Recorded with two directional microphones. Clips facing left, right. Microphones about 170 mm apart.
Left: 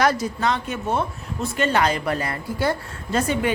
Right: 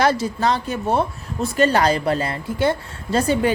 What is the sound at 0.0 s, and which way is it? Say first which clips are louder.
Speech: right 2 dB; 30° right (ahead or behind).